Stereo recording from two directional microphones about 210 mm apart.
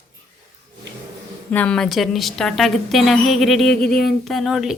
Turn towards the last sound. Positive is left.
turn(degrees=0)  # may be behind; listen again after turning